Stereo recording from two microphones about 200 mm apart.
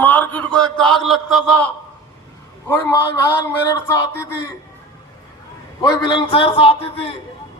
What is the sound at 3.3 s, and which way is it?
A man's voice, 15° left (ahead or behind).